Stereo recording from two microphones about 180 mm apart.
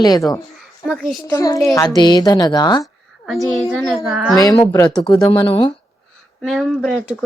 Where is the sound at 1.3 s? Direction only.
20° left (ahead or behind).